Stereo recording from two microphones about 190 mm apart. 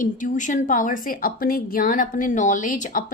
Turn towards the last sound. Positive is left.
turn(degrees=45)  # may be behind; listen again after turning